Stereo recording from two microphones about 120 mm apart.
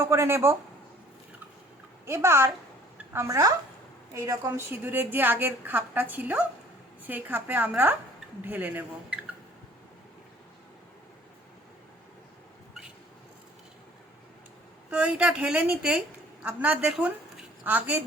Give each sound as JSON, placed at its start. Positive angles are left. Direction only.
{"t": 0.0, "sound": "speech", "side_deg": -20}
{"t": 2.0, "sound": "speech", "side_deg": -20}
{"t": 4.7, "sound": "a woman's voice", "side_deg": -15}
{"t": 14.8, "sound": "a woman's voice", "side_deg": -10}